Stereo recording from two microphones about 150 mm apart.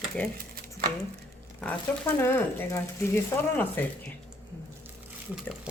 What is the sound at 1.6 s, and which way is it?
Speech, 10° left (ahead or behind).